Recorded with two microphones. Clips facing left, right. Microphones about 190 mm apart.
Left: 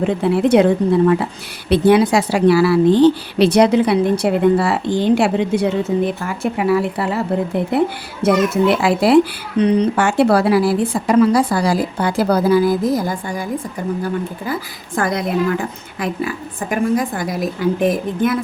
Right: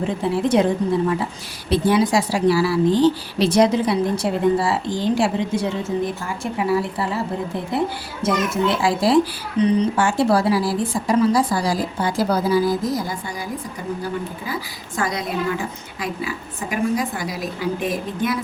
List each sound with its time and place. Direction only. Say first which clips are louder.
0.0 s a woman's voice: left 5 dB; 65° left (ahead or behind)
8.7 s a woman's voice: left 4 dB; 65° left (ahead or behind)